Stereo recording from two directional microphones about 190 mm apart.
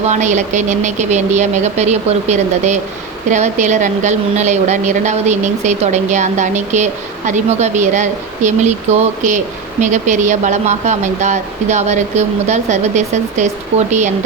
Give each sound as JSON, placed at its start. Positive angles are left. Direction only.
{"t": 0.0, "sound": "a woman's voice", "side_deg": -40}